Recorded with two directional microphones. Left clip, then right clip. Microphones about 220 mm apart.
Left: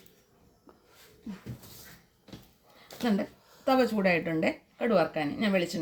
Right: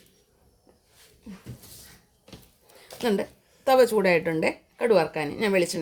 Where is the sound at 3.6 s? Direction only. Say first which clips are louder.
Right 6 dB; 55° right (ahead or behind).